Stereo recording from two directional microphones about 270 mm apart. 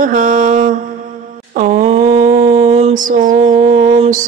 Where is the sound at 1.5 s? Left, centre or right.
Right.